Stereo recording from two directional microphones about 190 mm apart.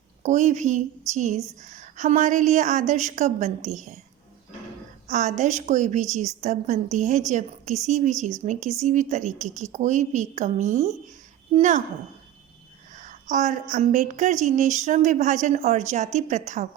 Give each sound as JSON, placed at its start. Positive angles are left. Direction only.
{"t": 0.2, "sound": "a woman's voice", "side_deg": -40}
{"t": 5.0, "sound": "a woman's voice", "side_deg": -40}
{"t": 13.0, "sound": "a woman's voice", "side_deg": -40}